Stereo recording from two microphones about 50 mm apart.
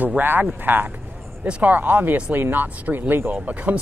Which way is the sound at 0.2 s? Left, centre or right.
Right.